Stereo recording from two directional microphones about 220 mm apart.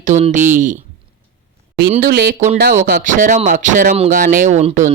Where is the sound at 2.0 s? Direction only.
45° right (ahead or behind).